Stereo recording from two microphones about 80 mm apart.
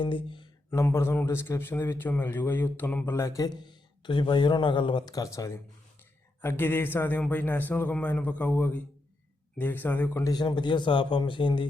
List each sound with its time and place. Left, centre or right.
0.0 s speech: left
0.7 s a man's voice: left
3.2 s a man's voice: left
3.4 s speech: left
5.0 s speech: left
6.4 s a man's voice: left
10.2 s speech: left